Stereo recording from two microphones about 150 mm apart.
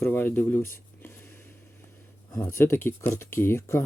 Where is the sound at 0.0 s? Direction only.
15° left (ahead or behind).